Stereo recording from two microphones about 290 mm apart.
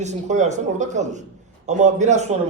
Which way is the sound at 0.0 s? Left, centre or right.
Right.